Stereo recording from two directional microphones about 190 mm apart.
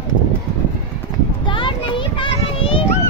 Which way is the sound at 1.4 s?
25° left (ahead or behind).